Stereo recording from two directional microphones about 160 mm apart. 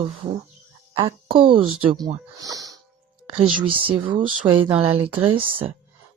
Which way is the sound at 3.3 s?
35° right (ahead or behind).